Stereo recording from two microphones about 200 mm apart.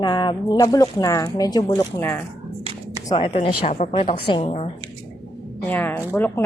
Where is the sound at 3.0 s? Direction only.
25° left (ahead or behind).